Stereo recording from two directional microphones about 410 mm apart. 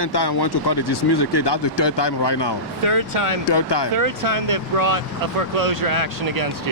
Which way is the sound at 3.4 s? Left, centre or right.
Left.